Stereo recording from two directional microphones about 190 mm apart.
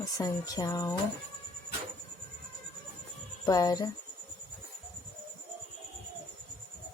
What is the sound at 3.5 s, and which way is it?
Speech, 20° left (ahead or behind).